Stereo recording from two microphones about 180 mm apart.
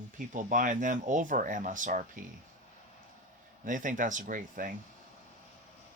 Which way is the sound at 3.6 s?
45° right (ahead or behind).